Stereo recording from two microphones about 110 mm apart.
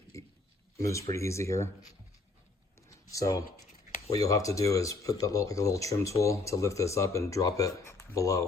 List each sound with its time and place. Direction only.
0.1 s a sound: 30° left (ahead or behind)
0.8 s speech: 30° left (ahead or behind)
3.1 s speech: 30° left (ahead or behind)